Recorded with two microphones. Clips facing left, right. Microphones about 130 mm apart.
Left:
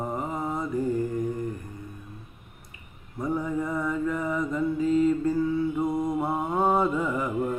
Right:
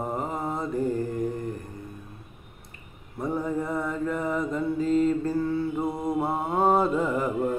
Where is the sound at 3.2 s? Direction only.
25° right (ahead or behind).